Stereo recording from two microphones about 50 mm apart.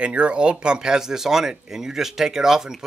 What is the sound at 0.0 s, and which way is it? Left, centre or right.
Speech, right.